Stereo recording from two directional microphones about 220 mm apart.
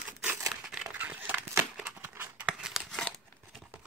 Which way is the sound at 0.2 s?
5° right (ahead or behind).